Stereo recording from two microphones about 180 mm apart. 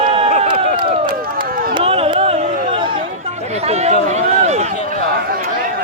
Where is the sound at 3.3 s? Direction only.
35° right (ahead or behind).